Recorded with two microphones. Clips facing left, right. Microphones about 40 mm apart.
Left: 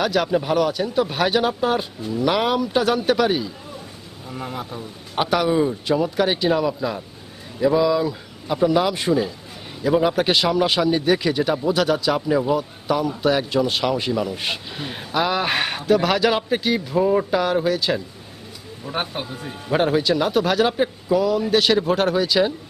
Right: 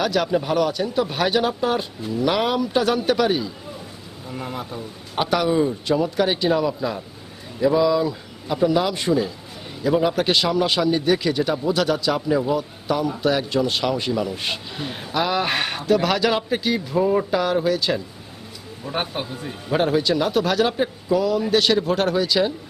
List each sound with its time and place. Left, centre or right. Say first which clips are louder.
0.0 s a man's voice: left 1 dB; centre